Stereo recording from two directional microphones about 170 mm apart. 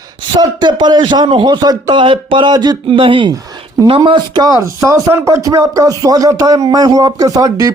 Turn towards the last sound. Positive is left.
turn(degrees=-20)  # may be behind; listen again after turning